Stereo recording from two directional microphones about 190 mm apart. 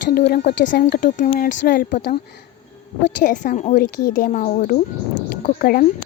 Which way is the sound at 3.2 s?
40° left (ahead or behind).